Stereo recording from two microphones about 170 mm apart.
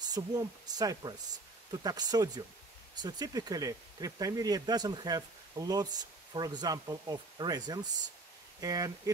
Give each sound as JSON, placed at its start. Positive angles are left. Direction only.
{"t": 0.1, "sound": "speech", "side_deg": -25}